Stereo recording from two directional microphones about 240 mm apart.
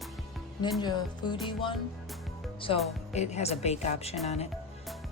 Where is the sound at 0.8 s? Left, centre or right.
Centre.